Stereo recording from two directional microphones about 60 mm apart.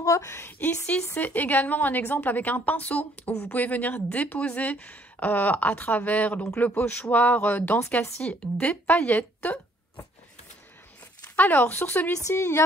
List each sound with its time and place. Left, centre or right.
0.0 s a woman's voice: left
0.3 s speech: left
0.6 s a woman's voice: left
11.3 s a woman's voice: left
12.3 s speech: left